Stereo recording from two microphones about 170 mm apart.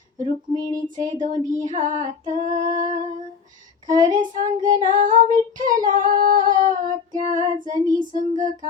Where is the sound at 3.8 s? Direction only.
25° right (ahead or behind).